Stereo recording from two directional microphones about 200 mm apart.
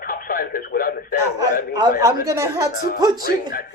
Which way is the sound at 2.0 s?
15° right (ahead or behind).